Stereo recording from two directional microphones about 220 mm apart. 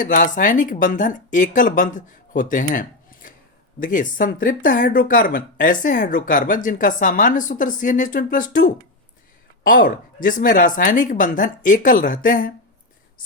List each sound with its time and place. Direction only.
0.0 s speech: 35° left (ahead or behind)